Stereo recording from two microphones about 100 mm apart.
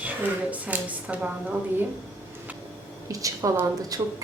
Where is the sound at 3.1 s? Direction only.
35° right (ahead or behind).